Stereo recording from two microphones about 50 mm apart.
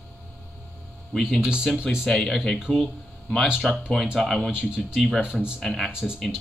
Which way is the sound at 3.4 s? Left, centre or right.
Centre.